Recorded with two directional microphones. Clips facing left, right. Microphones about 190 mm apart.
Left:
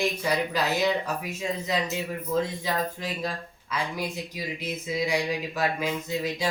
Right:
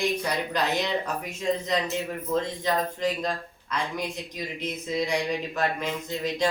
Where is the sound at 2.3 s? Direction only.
5° left (ahead or behind).